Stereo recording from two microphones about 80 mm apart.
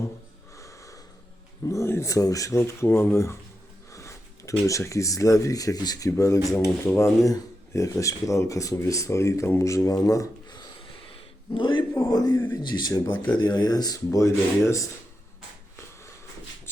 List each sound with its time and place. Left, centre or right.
1.6 s speech: left
3.9 s a sound: left
4.6 s speech: left
6.1 s speech: left
7.3 s speech: left
10.5 s a sound: left
11.5 s a man's voice: left
11.9 s a man's voice: left